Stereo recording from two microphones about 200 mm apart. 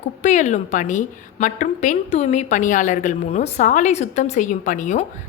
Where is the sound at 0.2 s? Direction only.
35° left (ahead or behind).